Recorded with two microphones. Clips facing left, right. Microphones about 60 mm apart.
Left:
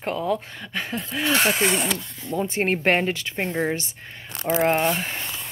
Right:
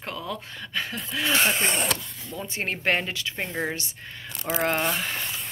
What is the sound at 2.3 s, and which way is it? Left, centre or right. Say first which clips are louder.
Speech: left 8 dB; left.